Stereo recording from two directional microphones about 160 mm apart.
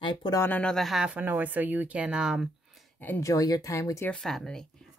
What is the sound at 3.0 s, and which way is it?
A woman's voice, 15° left (ahead or behind).